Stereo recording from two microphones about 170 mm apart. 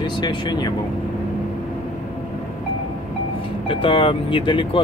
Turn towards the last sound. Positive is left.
turn(degrees=30)  # may be behind; listen again after turning